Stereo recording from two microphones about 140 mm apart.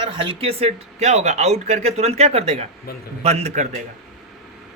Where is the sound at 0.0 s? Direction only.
40° right (ahead or behind).